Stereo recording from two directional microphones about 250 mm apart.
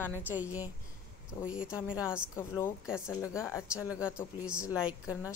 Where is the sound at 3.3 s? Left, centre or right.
Centre.